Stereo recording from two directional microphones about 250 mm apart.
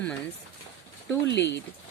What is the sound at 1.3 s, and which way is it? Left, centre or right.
Speech, left.